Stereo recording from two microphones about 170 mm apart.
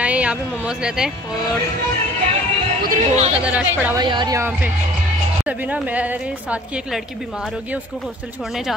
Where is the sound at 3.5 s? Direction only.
10° right (ahead or behind).